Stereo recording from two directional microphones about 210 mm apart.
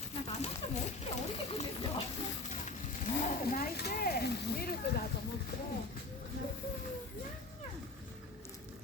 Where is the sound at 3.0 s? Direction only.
40° left (ahead or behind).